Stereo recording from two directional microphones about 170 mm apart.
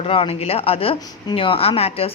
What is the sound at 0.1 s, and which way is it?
A woman's voice, 35° left (ahead or behind).